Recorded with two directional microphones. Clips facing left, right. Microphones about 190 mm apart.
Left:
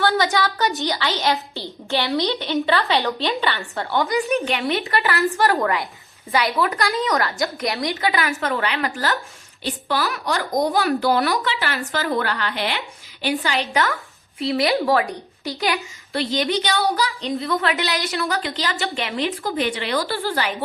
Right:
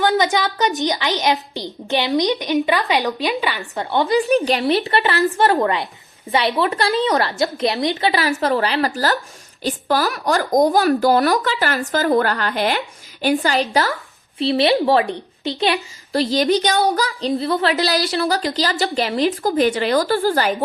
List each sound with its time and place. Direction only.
0.0 s a woman's voice: 20° right (ahead or behind)
3.9 s a woman's voice: 30° right (ahead or behind)
14.3 s a woman's voice: 30° right (ahead or behind)
16.1 s a woman's voice: 40° right (ahead or behind)